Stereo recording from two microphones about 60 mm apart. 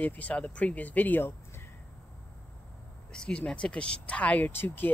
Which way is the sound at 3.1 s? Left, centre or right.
Centre.